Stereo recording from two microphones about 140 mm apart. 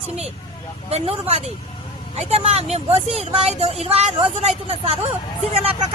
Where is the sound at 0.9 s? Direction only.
45° right (ahead or behind).